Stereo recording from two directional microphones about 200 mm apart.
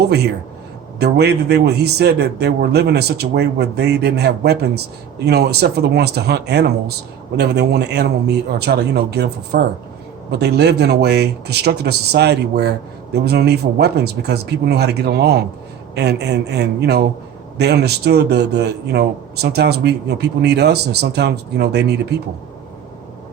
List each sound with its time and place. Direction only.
0.0 s speech: 55° right (ahead or behind)